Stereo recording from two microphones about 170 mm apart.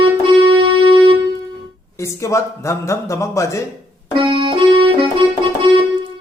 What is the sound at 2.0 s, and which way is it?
A man's voice, 15° left (ahead or behind).